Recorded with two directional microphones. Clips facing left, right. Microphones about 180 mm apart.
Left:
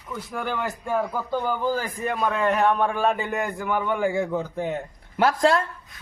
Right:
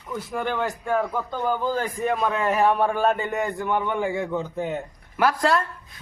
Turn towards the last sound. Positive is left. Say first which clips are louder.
# left 1 dB
turn(degrees=25)  # may be behind; listen again after turning